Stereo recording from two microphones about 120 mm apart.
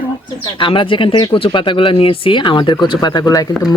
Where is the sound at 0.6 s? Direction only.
45° left (ahead or behind).